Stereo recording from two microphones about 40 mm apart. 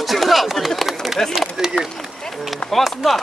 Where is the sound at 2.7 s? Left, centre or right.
Centre.